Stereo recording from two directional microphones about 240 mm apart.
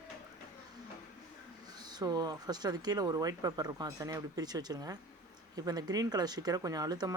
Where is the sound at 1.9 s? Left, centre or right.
Centre.